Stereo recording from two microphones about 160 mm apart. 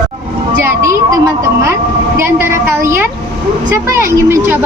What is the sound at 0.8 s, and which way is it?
A woman's voice, 20° right (ahead or behind).